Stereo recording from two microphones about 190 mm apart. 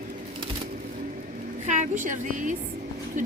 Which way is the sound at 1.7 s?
40° right (ahead or behind).